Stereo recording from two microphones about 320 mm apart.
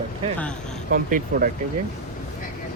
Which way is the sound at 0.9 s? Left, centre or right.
Right.